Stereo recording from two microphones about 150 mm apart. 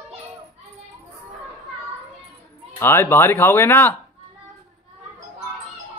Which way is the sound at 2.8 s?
15° left (ahead or behind).